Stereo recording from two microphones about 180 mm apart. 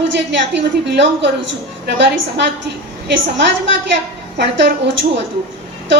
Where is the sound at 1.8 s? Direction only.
75° right (ahead or behind).